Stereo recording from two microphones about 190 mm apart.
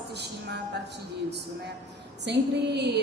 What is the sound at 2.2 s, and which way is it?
Speech, 60° right (ahead or behind).